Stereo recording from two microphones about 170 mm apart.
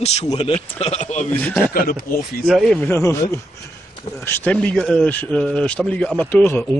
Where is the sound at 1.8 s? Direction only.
60° left (ahead or behind).